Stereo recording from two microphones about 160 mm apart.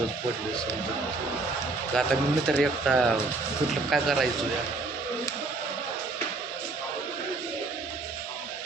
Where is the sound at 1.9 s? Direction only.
Centre (ahead or behind).